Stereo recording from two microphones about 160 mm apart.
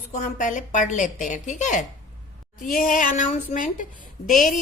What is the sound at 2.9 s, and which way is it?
A woman's voice, 55° left (ahead or behind).